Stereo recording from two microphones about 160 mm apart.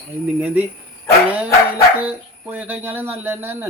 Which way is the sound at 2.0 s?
10° right (ahead or behind).